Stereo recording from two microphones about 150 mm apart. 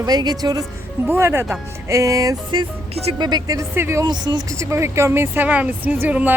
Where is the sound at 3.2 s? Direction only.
30° right (ahead or behind).